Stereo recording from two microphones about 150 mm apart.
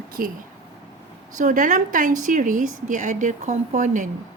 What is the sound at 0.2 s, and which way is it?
Speech, 70° right (ahead or behind).